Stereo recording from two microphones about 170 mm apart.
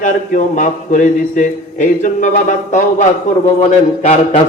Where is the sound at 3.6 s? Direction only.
40° left (ahead or behind).